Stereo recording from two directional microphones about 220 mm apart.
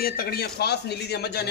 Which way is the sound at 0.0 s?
45° left (ahead or behind).